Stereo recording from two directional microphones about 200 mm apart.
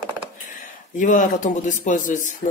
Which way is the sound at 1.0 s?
40° left (ahead or behind).